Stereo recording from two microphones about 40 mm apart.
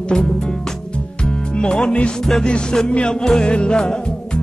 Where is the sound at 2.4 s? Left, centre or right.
Centre.